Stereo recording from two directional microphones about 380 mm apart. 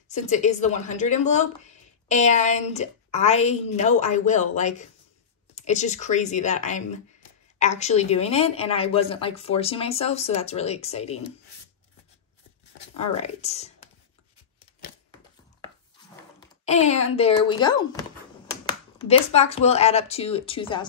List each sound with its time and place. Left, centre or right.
0.1 s a woman's voice: centre
12.9 s a woman's voice: centre
16.3 s speech: centre